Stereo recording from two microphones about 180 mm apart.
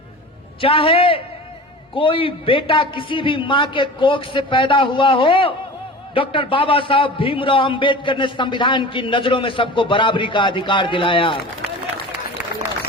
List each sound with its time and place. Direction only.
0.6 s a man's voice: 30° left (ahead or behind)